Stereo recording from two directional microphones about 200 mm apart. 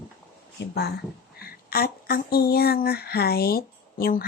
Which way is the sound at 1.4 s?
50° left (ahead or behind).